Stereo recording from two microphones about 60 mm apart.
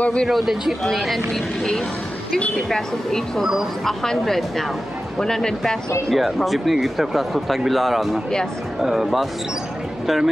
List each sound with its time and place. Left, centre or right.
0.0 s speech: centre
0.3 s speech: centre
2.3 s speech: centre